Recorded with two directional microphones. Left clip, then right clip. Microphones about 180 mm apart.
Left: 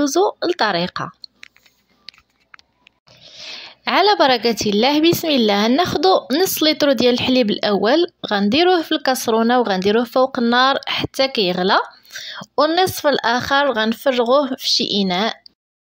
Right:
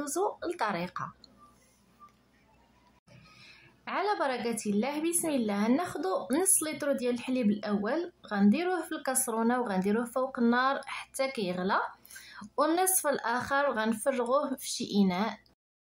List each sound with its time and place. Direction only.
0.0 s speech: 30° left (ahead or behind)
3.4 s speech: 35° left (ahead or behind)